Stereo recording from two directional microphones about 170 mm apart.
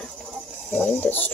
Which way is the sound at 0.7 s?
10° left (ahead or behind).